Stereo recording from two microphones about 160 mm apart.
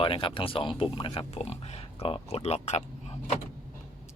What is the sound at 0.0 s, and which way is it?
Speech, 35° left (ahead or behind).